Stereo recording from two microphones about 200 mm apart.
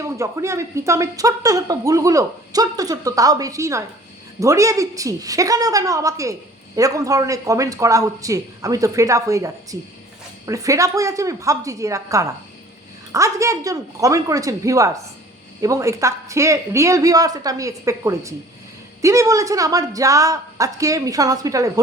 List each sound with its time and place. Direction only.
0.0 s speech: 15° right (ahead or behind)